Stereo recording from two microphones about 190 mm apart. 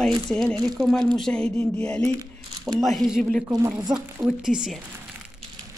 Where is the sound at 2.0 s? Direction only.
15° right (ahead or behind).